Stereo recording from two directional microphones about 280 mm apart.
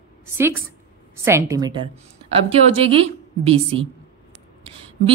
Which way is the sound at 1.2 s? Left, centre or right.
Centre.